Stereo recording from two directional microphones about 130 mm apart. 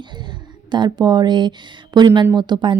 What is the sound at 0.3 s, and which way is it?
Speech, 35° right (ahead or behind).